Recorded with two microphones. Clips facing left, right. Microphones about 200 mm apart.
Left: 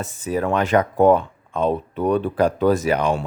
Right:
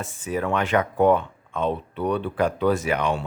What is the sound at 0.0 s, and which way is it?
Speech, 40° left (ahead or behind).